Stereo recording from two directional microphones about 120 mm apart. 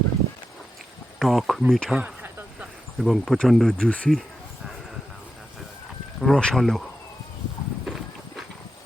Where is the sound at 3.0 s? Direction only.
Centre (ahead or behind).